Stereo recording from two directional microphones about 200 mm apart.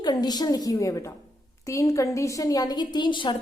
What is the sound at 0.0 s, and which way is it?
A woman's voice, 20° left (ahead or behind).